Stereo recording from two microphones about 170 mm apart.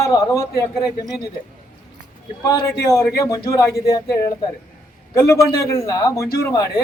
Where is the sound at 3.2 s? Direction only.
20° left (ahead or behind).